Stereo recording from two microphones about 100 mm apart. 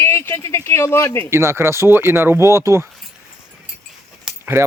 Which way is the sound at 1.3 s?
30° right (ahead or behind).